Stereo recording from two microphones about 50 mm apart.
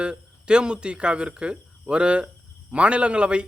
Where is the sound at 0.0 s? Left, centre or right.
Centre.